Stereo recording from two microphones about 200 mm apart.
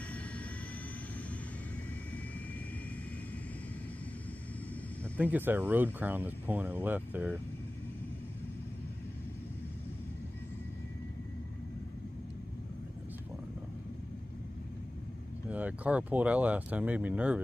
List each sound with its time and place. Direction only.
5.1 s speech: 10° right (ahead or behind)
15.5 s speech: 5° right (ahead or behind)